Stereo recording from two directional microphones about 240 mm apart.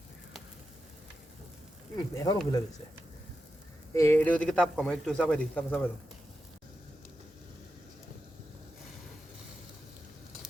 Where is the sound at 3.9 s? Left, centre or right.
Centre.